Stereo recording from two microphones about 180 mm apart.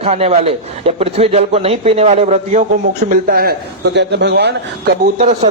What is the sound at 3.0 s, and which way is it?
A man's voice, 50° right (ahead or behind).